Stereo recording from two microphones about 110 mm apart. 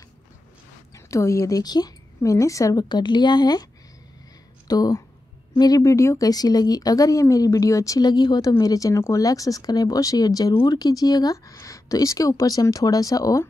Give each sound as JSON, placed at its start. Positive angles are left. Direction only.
{"t": 0.9, "sound": "speech", "side_deg": 30}
{"t": 4.6, "sound": "speech", "side_deg": 35}